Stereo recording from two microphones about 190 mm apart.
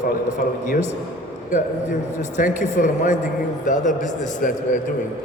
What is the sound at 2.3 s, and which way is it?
A man's voice, 40° left (ahead or behind).